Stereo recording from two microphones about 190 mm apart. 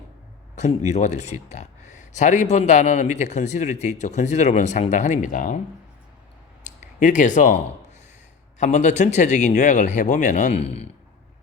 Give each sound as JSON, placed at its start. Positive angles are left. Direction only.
{"t": 0.9, "sound": "speech", "side_deg": 35}
{"t": 6.7, "sound": "speech", "side_deg": 40}